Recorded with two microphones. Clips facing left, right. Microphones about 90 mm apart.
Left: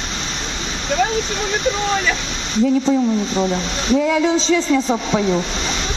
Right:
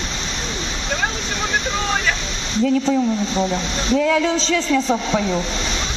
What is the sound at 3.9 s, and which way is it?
Speech, 20° left (ahead or behind).